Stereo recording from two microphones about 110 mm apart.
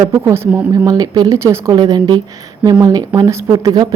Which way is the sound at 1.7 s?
35° right (ahead or behind).